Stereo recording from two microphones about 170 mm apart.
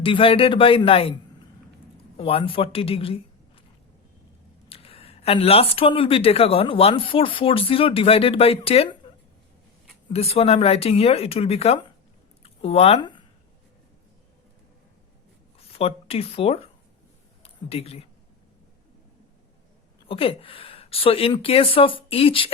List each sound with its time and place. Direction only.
0.0 s speech: 30° left (ahead or behind)
2.1 s a man's voice: 35° left (ahead or behind)
4.7 s speech: 35° left (ahead or behind)
10.1 s speech: 35° left (ahead or behind)
12.4 s a sound: 35° left (ahead or behind)
15.7 s speech: 35° left (ahead or behind)
20.1 s speech: 35° left (ahead or behind)